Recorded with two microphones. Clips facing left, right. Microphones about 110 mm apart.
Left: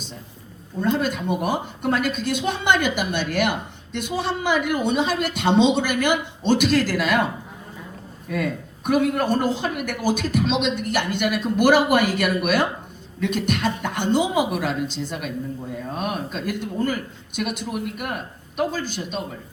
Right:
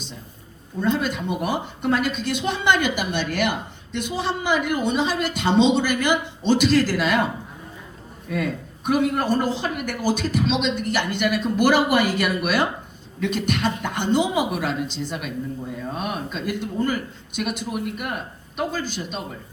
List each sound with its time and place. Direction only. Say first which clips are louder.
0.8 s speech: left 1 dB; 45° left (ahead or behind)
8.3 s speech: even; 50° left (ahead or behind)